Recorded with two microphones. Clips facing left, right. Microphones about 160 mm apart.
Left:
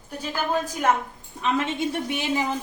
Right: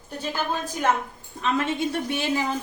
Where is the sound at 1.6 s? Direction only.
15° left (ahead or behind).